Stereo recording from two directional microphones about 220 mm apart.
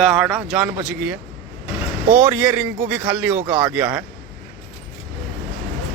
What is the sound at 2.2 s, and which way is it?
Speech, 10° right (ahead or behind).